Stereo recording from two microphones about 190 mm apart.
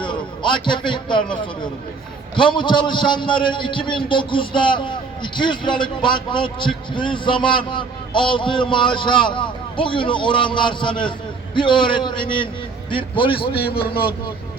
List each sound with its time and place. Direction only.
0.0 s a sound: 25° left (ahead or behind)
0.9 s a man's voice: 25° left (ahead or behind)
2.3 s a man's voice: 25° left (ahead or behind)
13.5 s a man's voice: 55° left (ahead or behind)